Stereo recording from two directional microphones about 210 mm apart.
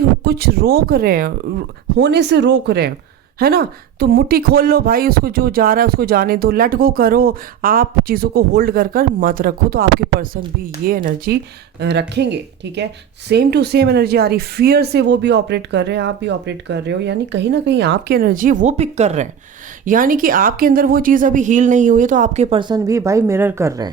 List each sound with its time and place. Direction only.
0.3 s speech: 45° right (ahead or behind)
11.8 s a woman's voice: 55° right (ahead or behind); by 23.9 s 15° right (ahead or behind)